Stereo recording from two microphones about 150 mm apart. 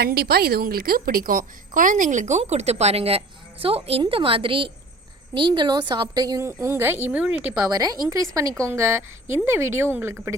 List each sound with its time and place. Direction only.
0.0 s a woman's voice: 90° right; by 7.3 s 10° right (ahead or behind)
7.6 s a woman's voice: 25° right (ahead or behind)